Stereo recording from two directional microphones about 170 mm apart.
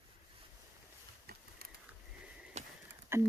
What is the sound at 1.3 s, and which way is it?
Patter, 65° right (ahead or behind).